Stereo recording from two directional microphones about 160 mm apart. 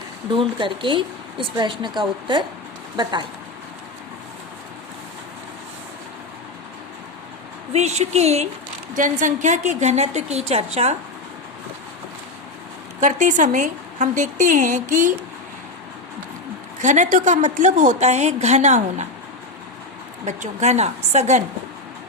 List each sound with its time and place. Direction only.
0.3 s a woman's voice: 30° right (ahead or behind)
7.7 s a woman's voice: 45° right (ahead or behind)
9.0 s a woman's voice: 55° right (ahead or behind)
13.0 s a woman's voice: 50° right (ahead or behind)
16.8 s a woman's voice: 50° right (ahead or behind)
20.2 s a woman's voice: 45° right (ahead or behind)